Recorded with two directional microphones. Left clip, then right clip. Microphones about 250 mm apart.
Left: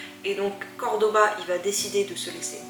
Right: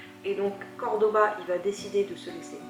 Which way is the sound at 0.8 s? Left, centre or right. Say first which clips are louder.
Left 2 dB; right.